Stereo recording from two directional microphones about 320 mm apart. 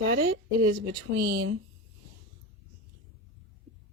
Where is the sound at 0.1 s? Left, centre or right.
Right.